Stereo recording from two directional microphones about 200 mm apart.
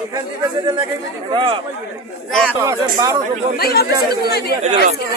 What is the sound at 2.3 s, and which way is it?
Speech, 5° left (ahead or behind).